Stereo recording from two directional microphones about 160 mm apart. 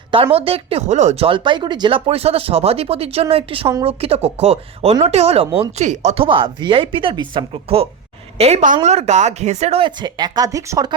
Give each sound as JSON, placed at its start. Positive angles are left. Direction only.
{"t": 0.3, "sound": "speech", "side_deg": -35}
{"t": 6.2, "sound": "speech", "side_deg": -30}